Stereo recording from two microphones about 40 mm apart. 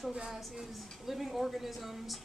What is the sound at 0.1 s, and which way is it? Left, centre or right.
Speech, right.